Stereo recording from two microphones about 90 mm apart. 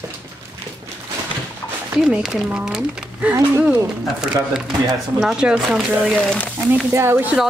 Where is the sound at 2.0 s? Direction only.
5° right (ahead or behind).